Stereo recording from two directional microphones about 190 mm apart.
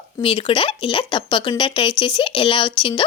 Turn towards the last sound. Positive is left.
turn(degrees=25)  # may be behind; listen again after turning